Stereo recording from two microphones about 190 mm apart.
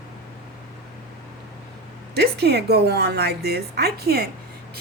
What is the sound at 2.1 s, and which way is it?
A woman's voice, 60° right (ahead or behind).